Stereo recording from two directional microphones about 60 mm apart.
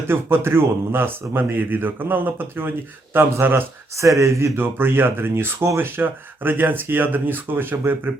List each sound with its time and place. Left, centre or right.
0.1 s a man's voice: right
3.9 s speech: right
4.5 s a man's voice: right